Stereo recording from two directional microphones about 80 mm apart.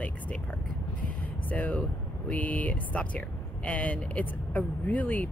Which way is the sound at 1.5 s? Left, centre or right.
Centre.